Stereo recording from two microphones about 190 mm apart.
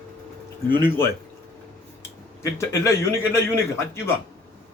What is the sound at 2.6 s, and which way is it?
A man's voice, 15° left (ahead or behind).